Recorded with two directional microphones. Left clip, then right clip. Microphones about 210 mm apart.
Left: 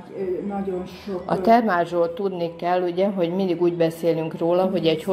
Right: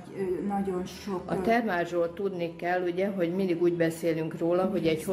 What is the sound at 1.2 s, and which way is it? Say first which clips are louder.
A woman's voice: left 10 dB; 10° left (ahead or behind).